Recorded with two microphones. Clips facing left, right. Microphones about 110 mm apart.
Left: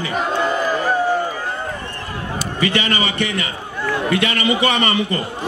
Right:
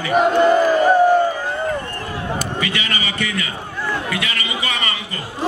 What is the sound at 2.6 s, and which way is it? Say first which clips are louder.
A man's voice: left 5 dB; 35° left (ahead or behind).